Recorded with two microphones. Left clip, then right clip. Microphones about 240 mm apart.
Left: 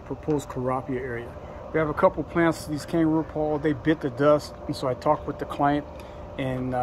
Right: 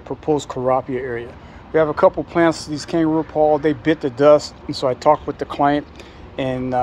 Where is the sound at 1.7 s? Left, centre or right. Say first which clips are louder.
Right 7 dB; right.